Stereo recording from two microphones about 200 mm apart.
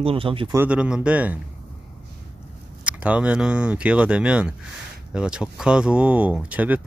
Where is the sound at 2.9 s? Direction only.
5° right (ahead or behind).